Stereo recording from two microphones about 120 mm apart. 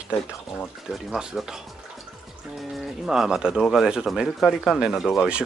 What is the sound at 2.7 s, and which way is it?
Speech, 5° right (ahead or behind).